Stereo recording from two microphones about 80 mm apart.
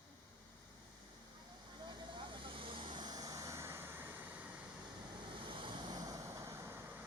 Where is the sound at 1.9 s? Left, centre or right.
Right.